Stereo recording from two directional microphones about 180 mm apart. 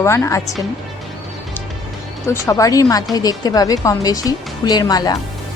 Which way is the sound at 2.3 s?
20° left (ahead or behind).